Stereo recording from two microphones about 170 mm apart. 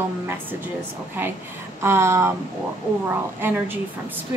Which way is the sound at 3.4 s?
10° right (ahead or behind).